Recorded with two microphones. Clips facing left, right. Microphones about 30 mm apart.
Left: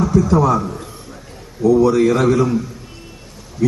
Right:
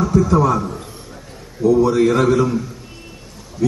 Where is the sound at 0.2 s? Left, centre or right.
Right.